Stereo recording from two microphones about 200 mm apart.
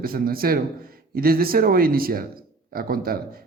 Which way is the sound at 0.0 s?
45° right (ahead or behind).